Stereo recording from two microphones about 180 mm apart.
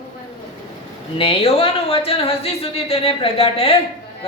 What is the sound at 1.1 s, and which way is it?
A woman's voice, 30° left (ahead or behind).